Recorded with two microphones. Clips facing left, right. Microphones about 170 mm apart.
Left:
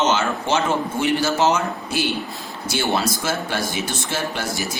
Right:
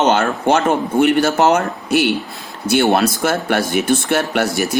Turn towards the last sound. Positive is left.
turn(degrees=-65)  # may be behind; listen again after turning